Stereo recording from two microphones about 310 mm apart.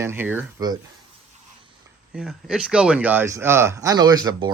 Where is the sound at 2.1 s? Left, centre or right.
Centre.